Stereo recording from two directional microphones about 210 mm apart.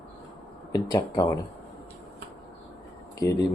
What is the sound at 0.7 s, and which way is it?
Speech, 15° left (ahead or behind).